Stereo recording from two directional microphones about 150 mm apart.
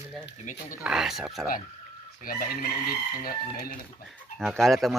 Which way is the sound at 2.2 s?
70° left (ahead or behind).